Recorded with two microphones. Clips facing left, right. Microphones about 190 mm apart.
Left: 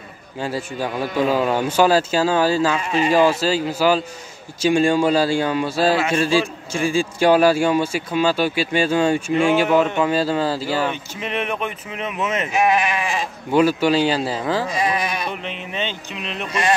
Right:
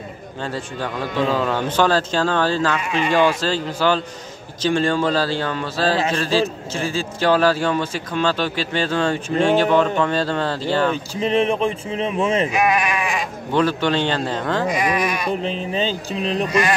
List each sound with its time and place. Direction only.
0.4 s a man's voice: 10° left (ahead or behind)
11.1 s speech: 30° right (ahead or behind)
12.6 s speech: 25° left (ahead or behind)
13.5 s a man's voice: 10° left (ahead or behind)
14.7 s sheep: 30° left (ahead or behind)
15.4 s speech: 35° right (ahead or behind)